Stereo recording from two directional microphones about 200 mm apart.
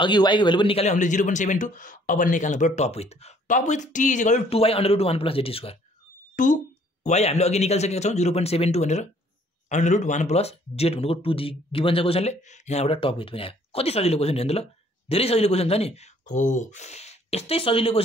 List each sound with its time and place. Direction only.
0.0 s speech: 25° left (ahead or behind)
6.3 s speech: 40° left (ahead or behind)